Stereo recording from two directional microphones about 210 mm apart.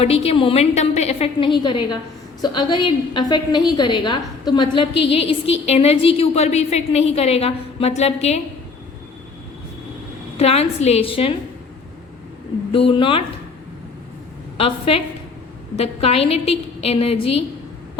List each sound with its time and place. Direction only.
0.0 s a woman's voice: 30° left (ahead or behind)
10.3 s a woman's voice: 30° left (ahead or behind)
12.9 s a woman's voice: 25° left (ahead or behind)
14.6 s a woman's voice: 25° left (ahead or behind)